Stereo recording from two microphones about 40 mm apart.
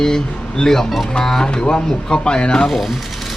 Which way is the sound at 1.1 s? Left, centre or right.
Centre.